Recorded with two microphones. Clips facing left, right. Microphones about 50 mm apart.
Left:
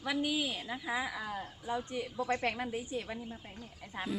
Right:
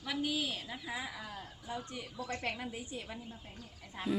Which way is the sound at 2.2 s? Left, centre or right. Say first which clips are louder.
Left 7 dB; centre.